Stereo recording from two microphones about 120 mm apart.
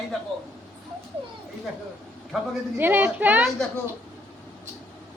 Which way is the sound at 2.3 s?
Centre (ahead or behind).